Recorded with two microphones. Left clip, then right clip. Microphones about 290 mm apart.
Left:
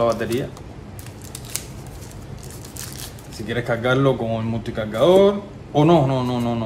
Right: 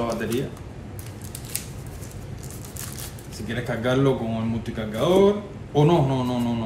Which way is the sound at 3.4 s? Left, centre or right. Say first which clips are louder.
Left 5 dB; left.